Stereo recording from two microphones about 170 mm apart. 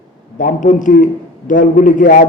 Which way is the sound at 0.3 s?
50° left (ahead or behind).